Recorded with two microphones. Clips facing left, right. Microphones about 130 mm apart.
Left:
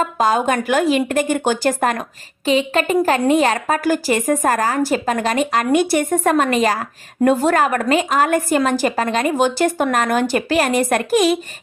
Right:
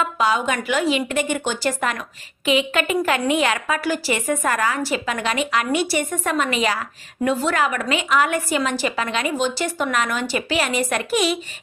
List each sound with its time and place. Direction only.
0.0 s a woman's voice: 45° left (ahead or behind)